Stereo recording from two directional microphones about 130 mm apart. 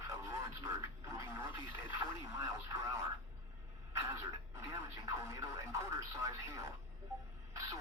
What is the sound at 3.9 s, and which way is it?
Radio, 20° right (ahead or behind).